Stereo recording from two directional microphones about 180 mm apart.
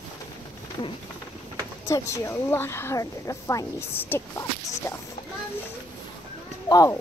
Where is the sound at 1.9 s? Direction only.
15° left (ahead or behind).